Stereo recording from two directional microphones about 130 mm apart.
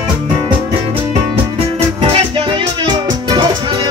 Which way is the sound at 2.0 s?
40° right (ahead or behind).